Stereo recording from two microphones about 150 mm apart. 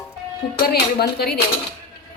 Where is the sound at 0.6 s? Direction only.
90° left.